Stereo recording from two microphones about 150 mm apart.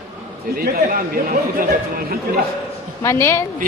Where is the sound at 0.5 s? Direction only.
85° right.